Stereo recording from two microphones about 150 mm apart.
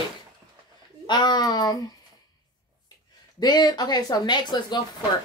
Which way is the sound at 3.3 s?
25° left (ahead or behind).